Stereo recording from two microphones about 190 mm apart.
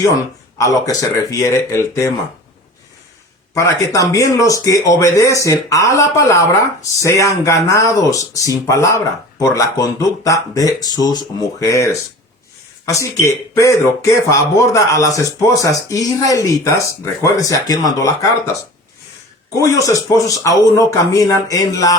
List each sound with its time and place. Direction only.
0.6 s speech: 20° left (ahead or behind)
3.5 s speech: 15° left (ahead or behind)
19.5 s speech: 20° left (ahead or behind)